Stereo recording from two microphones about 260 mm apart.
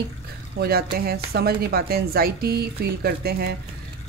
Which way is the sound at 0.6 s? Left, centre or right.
Right.